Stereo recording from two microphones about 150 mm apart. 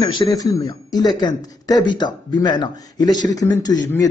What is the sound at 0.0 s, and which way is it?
A man's voice, 30° left (ahead or behind).